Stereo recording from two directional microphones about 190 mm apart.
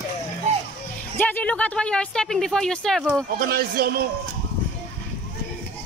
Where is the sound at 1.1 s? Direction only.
10° left (ahead or behind).